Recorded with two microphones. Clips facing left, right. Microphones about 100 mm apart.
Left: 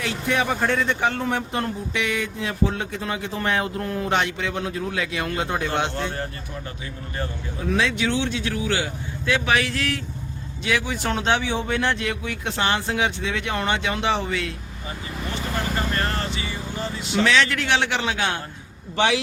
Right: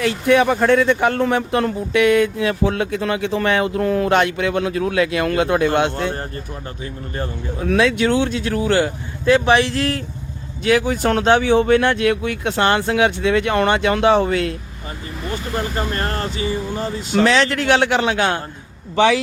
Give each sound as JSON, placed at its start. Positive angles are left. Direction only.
{"t": 0.0, "sound": "speech", "side_deg": -55}
{"t": 5.6, "sound": "speech", "side_deg": -50}
{"t": 7.7, "sound": "speech", "side_deg": -60}
{"t": 10.6, "sound": "speech", "side_deg": -45}
{"t": 15.9, "sound": "speech", "side_deg": -35}
{"t": 18.9, "sound": "speech", "side_deg": -40}